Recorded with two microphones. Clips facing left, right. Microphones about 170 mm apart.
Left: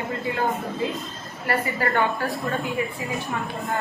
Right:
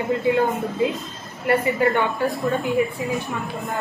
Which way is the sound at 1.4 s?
20° right (ahead or behind).